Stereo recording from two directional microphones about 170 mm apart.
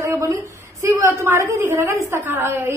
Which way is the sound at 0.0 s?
15° right (ahead or behind).